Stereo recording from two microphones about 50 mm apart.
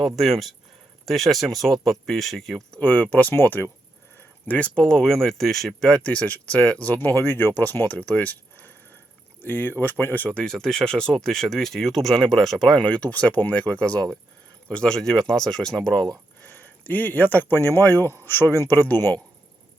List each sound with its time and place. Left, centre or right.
0.0 s speech: centre
2.8 s speech: left
3.3 s speech: left
4.4 s speech: left
4.8 s speech: centre
6.1 s speech: left
7.0 s speech: left
10.2 s speech: centre
12.9 s speech: left
16.4 s speech: left
18.7 s speech: left